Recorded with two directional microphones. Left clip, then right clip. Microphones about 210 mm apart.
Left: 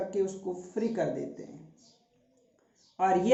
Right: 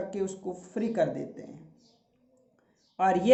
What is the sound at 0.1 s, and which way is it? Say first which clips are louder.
Speech: left 2 dB; 55° right (ahead or behind).